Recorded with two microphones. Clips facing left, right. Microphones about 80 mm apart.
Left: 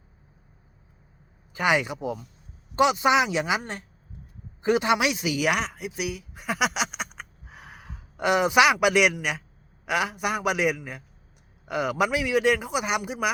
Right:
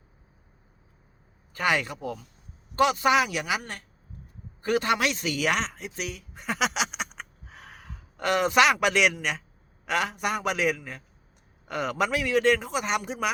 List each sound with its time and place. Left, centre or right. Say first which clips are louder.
1.5 s a man's voice: left 2 dB; centre